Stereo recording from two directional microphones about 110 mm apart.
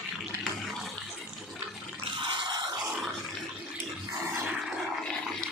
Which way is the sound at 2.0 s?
45° right (ahead or behind).